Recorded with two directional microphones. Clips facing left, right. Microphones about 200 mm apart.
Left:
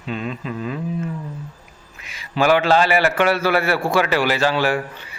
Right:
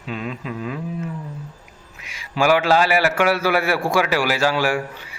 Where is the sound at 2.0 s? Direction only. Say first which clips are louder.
Left 1 dB; 10° right (ahead or behind).